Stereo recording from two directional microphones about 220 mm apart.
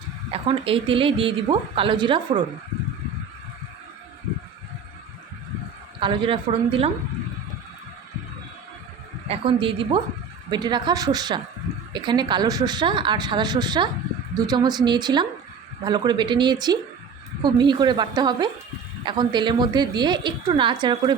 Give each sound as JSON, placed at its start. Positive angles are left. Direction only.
{"t": 0.3, "sound": "speech", "side_deg": -25}
{"t": 6.0, "sound": "speech", "side_deg": -25}
{"t": 9.3, "sound": "speech", "side_deg": -25}